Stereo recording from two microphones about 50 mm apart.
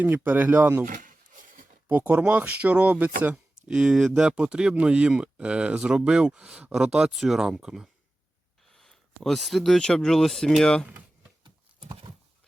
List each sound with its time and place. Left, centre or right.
0.3 s speech: right
1.9 s speech: right
3.3 s speech: centre
6.7 s speech: centre
8.7 s a sound: centre
9.8 s speech: centre
10.6 s speech: centre